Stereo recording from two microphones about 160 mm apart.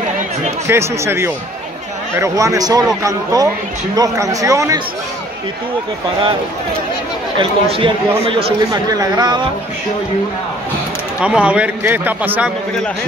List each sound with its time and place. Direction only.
0.7 s a man's voice: 15° right (ahead or behind)
7.3 s speech: 35° right (ahead or behind)
8.9 s speech: 20° right (ahead or behind)
11.1 s a man's voice: 5° right (ahead or behind)